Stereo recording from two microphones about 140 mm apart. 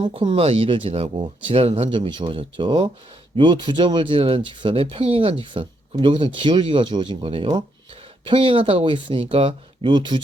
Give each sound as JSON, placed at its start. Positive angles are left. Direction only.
{"t": 0.0, "sound": "speech", "side_deg": -40}